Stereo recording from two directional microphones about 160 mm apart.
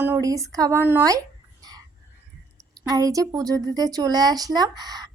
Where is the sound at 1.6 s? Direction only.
25° right (ahead or behind).